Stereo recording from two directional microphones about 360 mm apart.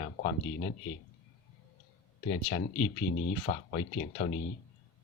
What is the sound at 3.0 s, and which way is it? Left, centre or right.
Speech, centre.